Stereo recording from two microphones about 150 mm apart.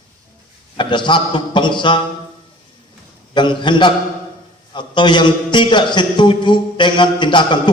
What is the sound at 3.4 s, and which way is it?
A man's voice, 30° left (ahead or behind).